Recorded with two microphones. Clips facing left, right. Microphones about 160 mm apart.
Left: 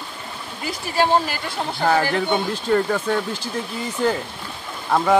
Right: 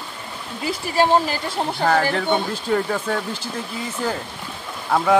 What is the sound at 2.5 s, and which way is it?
Speech, 5° right (ahead or behind).